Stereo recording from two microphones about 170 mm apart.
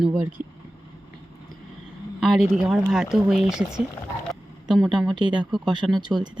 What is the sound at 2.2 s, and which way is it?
Speech, centre (ahead or behind).